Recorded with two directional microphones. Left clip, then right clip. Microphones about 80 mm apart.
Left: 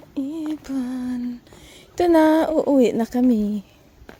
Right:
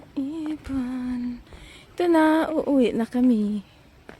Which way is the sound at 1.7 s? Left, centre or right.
Left.